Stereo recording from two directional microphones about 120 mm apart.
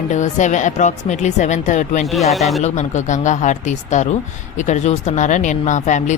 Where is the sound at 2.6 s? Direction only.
75° left (ahead or behind).